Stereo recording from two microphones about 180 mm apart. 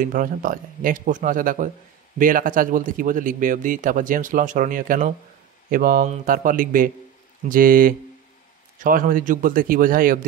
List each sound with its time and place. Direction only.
0.0 s a man's voice: 50° right (ahead or behind)